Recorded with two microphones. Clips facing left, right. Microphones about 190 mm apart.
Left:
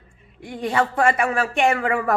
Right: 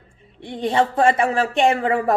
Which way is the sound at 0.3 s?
30° right (ahead or behind).